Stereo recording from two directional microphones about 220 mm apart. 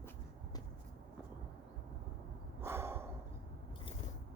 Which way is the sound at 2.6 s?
10° right (ahead or behind).